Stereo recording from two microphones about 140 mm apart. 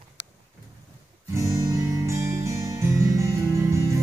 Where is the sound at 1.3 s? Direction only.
20° right (ahead or behind).